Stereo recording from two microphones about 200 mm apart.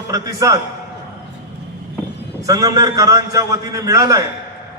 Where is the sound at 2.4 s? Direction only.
15° right (ahead or behind).